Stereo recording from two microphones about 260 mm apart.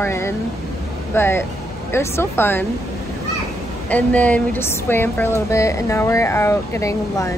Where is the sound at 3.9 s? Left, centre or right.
Centre.